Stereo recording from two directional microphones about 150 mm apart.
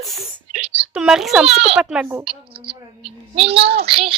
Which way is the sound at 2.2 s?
40° right (ahead or behind).